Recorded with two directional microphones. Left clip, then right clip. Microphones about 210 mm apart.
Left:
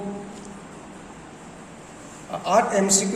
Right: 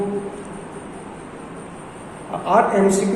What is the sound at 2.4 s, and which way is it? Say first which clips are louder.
Speech: right 4 dB; 50° left (ahead or behind).